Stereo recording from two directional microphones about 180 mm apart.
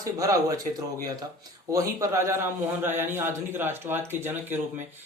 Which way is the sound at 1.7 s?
20° right (ahead or behind).